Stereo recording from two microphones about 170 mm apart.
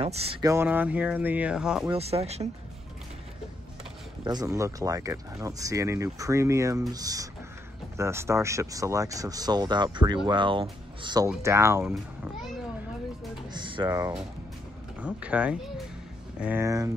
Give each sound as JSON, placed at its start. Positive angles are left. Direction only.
{"t": 0.0, "sound": "speech", "side_deg": -35}
{"t": 0.4, "sound": "speech", "side_deg": -15}
{"t": 1.9, "sound": "speech", "side_deg": -35}
{"t": 4.2, "sound": "speech", "side_deg": -25}
{"t": 11.2, "sound": "speech", "side_deg": -15}
{"t": 13.5, "sound": "a sound", "side_deg": -30}
{"t": 15.0, "sound": "speech", "side_deg": -5}